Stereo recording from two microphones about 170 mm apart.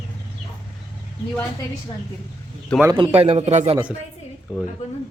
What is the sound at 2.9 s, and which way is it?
Speech, 35° right (ahead or behind).